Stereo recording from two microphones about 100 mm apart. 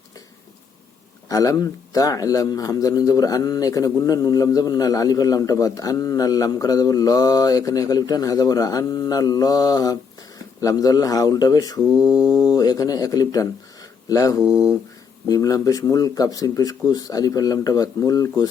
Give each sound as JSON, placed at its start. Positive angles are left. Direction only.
{"t": 1.3, "sound": "a man's voice", "side_deg": 35}
{"t": 11.9, "sound": "mantra", "side_deg": -10}
{"t": 12.4, "sound": "a man's voice", "side_deg": 40}